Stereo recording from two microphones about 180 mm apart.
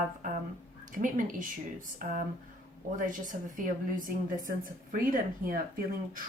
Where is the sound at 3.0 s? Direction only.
45° right (ahead or behind).